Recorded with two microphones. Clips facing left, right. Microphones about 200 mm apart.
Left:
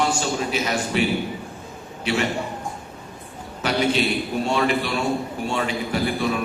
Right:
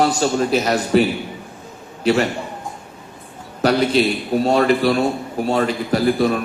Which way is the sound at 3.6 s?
40° right (ahead or behind).